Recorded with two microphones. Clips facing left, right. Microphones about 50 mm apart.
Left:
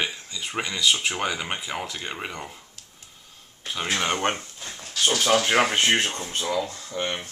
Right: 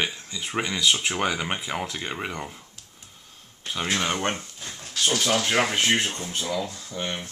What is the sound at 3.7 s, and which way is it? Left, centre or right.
Speech, centre.